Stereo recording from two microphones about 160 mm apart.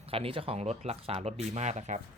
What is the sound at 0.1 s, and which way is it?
Speech, 35° right (ahead or behind).